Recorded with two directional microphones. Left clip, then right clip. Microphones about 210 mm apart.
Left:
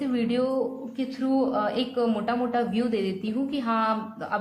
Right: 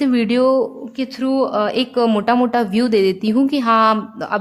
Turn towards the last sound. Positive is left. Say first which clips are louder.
# right 9 dB
turn(degrees=-45)  # may be behind; listen again after turning